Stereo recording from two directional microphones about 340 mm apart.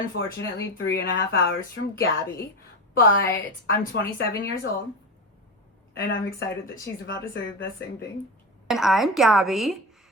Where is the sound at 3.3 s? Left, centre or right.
Left.